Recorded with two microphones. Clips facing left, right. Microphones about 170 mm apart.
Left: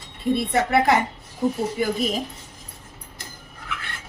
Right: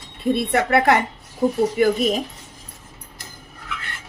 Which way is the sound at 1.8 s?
80° right.